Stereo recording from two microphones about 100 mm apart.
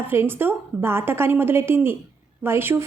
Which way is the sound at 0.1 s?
20° right (ahead or behind).